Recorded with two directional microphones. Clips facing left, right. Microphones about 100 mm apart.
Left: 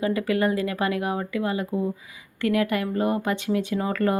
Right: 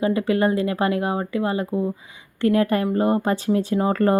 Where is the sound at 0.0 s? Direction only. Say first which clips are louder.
Right 3 dB; 25° right (ahead or behind).